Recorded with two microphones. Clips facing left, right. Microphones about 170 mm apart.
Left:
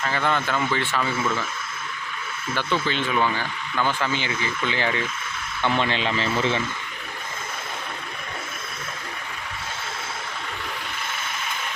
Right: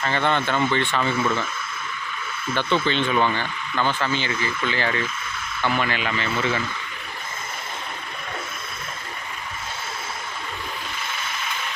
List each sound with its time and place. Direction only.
0.0 s speech: 5° left (ahead or behind)
2.8 s speech: 5° left (ahead or behind); by 6.6 s 30° left (ahead or behind)